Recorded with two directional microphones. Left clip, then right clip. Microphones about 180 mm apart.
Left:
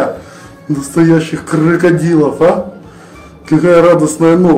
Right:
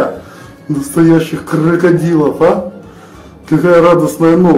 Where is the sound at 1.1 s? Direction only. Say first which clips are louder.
Even; 10° left (ahead or behind).